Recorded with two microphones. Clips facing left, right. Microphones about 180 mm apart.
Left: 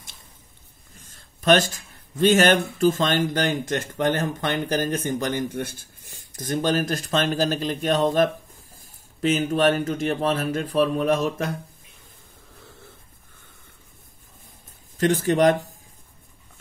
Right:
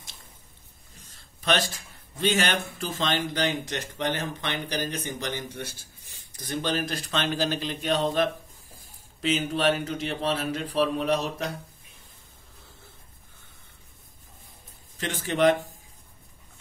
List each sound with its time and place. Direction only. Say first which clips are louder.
1.1 s a sound: left 8 dB; 50° left (ahead or behind)
2.1 s speech: left 8 dB; 45° left (ahead or behind)
15.0 s speech: left 6 dB; 40° left (ahead or behind)